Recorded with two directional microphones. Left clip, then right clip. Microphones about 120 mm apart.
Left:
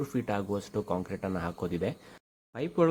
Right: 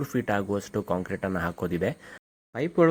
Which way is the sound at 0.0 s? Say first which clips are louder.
Right 5 dB; 25° right (ahead or behind).